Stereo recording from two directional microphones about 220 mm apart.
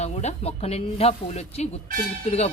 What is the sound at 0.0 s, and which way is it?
Speech, 30° left (ahead or behind).